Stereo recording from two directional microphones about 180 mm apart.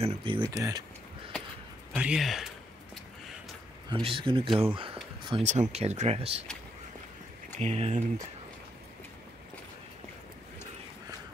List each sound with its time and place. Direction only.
0.0 s speech: 25° right (ahead or behind)
2.0 s speech: 5° right (ahead or behind)
3.9 s speech: 30° right (ahead or behind)
5.3 s speech: 40° right (ahead or behind)
7.5 s speech: 35° right (ahead or behind)